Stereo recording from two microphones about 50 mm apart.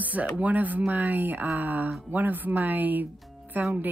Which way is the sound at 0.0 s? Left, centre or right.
Right.